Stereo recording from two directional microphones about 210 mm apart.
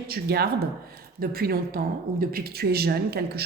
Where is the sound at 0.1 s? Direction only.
50° right (ahead or behind).